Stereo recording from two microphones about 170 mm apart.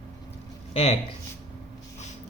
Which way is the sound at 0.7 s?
35° left (ahead or behind).